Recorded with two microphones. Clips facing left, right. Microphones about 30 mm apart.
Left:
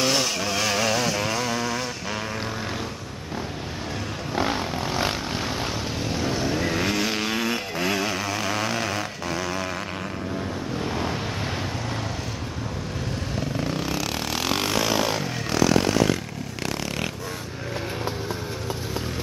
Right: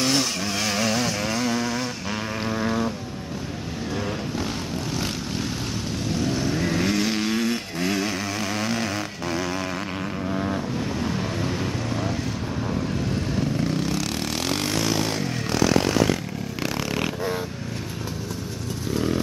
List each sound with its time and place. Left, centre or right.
0.0 s chainsaw: centre
4.4 s vehicle: left
6.0 s vehicle: centre
10.3 s vehicle: centre
13.6 s vehicle: centre